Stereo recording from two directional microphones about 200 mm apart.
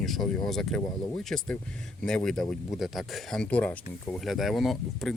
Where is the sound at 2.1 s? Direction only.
5° left (ahead or behind).